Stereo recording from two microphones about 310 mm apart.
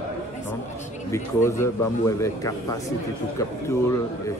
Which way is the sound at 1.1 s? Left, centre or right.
Centre.